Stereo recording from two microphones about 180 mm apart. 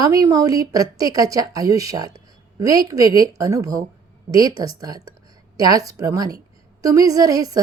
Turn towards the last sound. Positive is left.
turn(degrees=-20)  # may be behind; listen again after turning